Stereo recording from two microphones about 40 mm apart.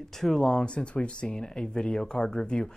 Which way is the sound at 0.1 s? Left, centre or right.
Centre.